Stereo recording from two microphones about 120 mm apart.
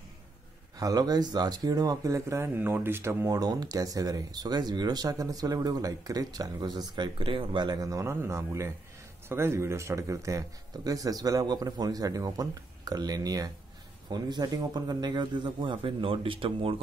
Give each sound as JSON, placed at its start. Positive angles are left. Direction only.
{"t": 0.7, "sound": "speech", "side_deg": -30}